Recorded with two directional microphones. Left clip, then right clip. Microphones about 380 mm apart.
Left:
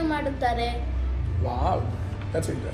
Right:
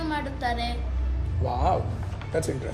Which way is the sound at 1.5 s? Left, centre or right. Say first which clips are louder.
Right 2 dB; right.